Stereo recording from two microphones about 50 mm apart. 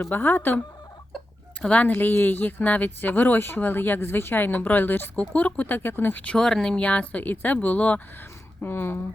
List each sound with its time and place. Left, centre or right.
0.1 s speech: left
1.7 s speech: left
6.3 s speech: centre
6.7 s speech: left
8.6 s speech: left